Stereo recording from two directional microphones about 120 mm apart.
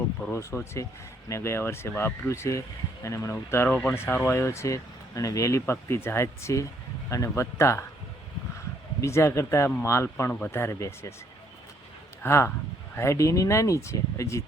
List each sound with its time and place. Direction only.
0.3 s speech: 20° left (ahead or behind)
9.0 s speech: 25° left (ahead or behind)
12.2 s speech: 20° left (ahead or behind)